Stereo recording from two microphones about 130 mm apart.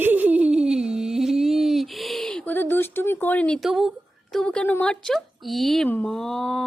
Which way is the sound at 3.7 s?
Centre (ahead or behind).